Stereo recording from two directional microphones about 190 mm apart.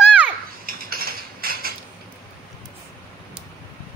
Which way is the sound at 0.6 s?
50° right (ahead or behind).